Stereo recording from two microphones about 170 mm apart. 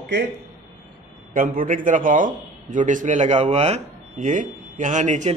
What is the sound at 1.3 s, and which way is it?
A man's voice, 55° right (ahead or behind).